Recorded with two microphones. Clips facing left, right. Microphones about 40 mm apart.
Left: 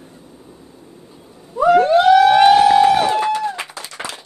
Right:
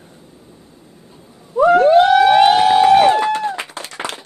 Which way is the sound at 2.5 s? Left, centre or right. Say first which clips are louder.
Even; right.